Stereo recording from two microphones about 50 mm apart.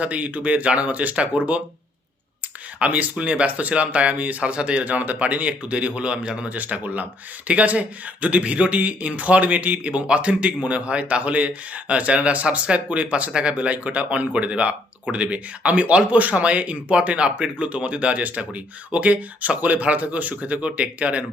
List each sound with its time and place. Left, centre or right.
0.0 s speech: right
2.7 s speech: right
6.5 s speech: right